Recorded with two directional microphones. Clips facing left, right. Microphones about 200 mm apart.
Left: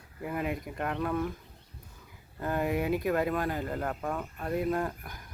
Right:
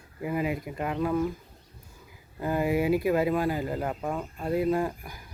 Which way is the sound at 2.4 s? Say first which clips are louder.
Right 4 dB; 5° right (ahead or behind).